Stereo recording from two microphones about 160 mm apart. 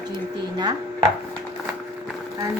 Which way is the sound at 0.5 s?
25° right (ahead or behind).